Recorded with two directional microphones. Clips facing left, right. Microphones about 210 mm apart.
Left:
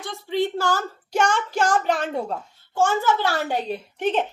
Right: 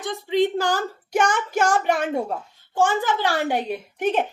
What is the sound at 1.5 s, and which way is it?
A woman's voice, 10° right (ahead or behind).